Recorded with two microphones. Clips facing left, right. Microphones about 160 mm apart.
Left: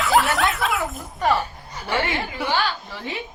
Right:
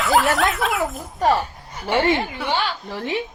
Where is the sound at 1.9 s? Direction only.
25° right (ahead or behind).